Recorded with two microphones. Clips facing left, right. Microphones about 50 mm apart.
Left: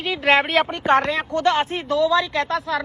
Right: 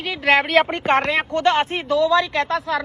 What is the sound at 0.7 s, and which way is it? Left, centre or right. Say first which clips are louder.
Speech: even; right.